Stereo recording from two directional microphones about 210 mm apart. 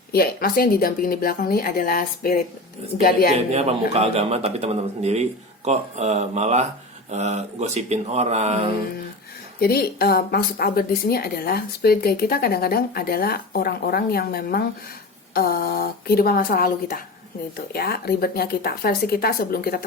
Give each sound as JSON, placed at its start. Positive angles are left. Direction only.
{"t": 0.1, "sound": "speech", "side_deg": 45}
{"t": 3.3, "sound": "a man's voice", "side_deg": -30}
{"t": 9.6, "sound": "speech", "side_deg": 45}